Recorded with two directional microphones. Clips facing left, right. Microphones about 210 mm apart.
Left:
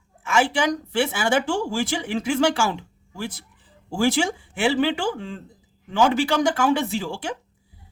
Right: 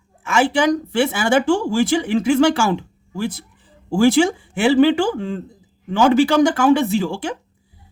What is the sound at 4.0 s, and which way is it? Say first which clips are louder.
Speech: right 7 dB; 55° right (ahead or behind).